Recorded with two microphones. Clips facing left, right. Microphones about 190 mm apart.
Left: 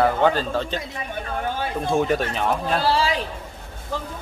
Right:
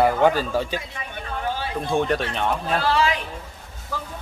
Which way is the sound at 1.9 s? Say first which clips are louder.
Left 1 dB; 5° left (ahead or behind).